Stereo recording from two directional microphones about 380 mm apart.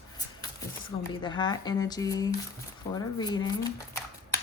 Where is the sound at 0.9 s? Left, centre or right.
Centre.